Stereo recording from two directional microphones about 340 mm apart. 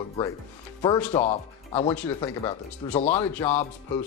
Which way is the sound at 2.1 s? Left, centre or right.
Centre.